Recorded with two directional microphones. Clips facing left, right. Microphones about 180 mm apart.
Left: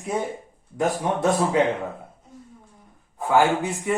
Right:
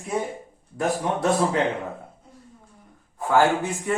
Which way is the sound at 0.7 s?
20° left (ahead or behind).